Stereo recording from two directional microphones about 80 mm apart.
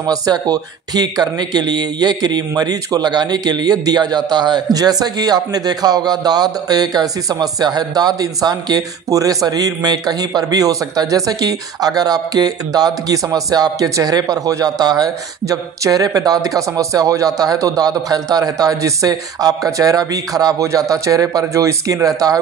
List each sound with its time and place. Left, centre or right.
0.0 s a man's voice: right